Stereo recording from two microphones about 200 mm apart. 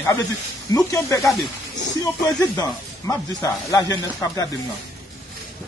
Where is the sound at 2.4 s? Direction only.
15° left (ahead or behind).